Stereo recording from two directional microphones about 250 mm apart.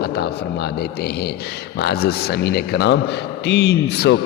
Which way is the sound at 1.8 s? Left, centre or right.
Left.